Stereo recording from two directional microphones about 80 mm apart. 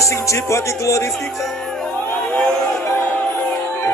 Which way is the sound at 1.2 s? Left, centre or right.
Centre.